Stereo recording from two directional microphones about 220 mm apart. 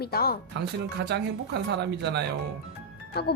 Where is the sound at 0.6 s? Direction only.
50° right (ahead or behind).